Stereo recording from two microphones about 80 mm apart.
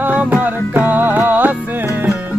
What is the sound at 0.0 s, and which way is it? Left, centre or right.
Music, right.